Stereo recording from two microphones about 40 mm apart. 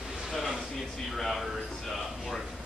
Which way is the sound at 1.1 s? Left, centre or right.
Centre.